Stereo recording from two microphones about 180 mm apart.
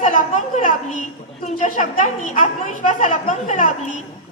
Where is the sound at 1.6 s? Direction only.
40° left (ahead or behind).